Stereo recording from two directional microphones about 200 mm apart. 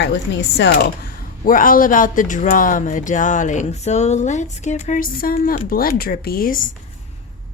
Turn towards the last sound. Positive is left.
turn(degrees=45)  # may be behind; listen again after turning